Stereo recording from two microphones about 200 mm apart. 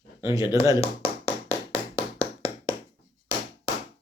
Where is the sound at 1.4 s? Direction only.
15° right (ahead or behind).